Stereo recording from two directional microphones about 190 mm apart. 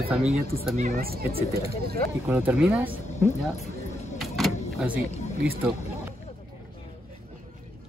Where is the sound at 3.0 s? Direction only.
40° left (ahead or behind).